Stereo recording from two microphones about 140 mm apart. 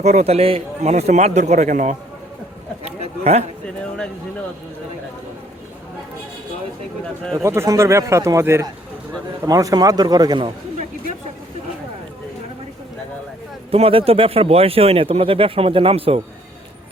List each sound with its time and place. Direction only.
0.0 s a man's voice: 55° right (ahead or behind)
2.8 s a sound: 50° right (ahead or behind)
7.4 s a man's voice: 20° right (ahead or behind)
13.7 s speech: 45° right (ahead or behind)